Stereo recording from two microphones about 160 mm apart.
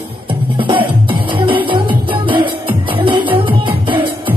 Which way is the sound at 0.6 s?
30° right (ahead or behind).